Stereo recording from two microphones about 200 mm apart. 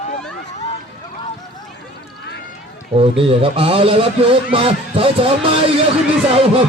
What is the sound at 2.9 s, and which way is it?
A man's voice, 30° right (ahead or behind).